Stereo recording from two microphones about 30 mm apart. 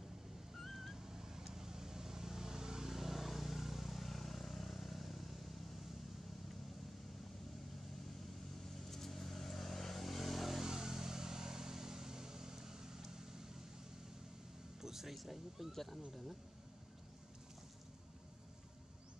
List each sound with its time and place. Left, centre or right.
0.6 s a sound: centre
1.0 s vehicle: centre
8.6 s vehicle: centre
10.6 s vehicle: centre
14.8 s a sound: centre
15.1 s speech: centre
15.7 s speech: centre